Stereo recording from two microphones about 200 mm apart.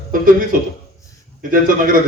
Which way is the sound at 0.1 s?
45° right (ahead or behind).